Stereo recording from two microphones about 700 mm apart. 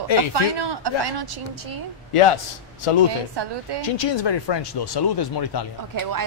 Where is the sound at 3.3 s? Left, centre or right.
Right.